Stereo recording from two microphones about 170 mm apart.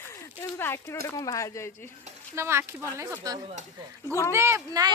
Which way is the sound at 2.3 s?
15° right (ahead or behind).